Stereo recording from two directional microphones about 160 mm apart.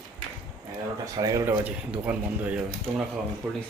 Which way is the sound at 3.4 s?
5° left (ahead or behind).